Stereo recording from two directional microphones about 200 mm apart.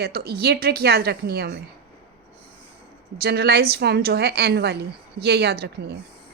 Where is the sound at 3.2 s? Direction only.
55° right (ahead or behind).